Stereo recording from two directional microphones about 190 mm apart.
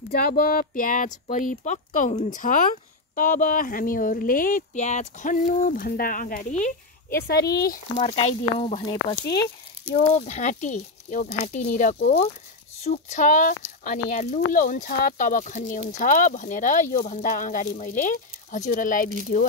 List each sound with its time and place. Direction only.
0.1 s speech: 50° left (ahead or behind)
7.2 s speech: 55° left (ahead or behind)
8.0 s speech: 35° left (ahead or behind)
8.8 s speech: 20° left (ahead or behind)
9.9 s speech: 35° left (ahead or behind)